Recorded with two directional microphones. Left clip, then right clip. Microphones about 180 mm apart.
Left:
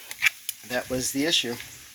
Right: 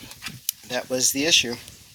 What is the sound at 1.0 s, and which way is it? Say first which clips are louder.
Speech: right 7 dB; 15° right (ahead or behind).